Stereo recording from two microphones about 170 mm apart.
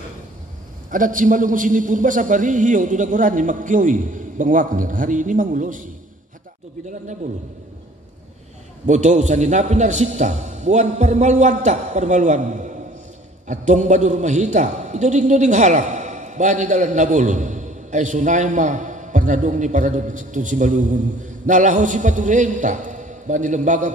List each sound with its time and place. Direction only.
0.8 s a man's voice: 50° right (ahead or behind)
8.8 s a man's voice: 45° right (ahead or behind)